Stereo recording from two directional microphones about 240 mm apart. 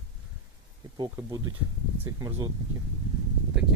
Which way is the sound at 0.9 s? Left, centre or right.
Centre.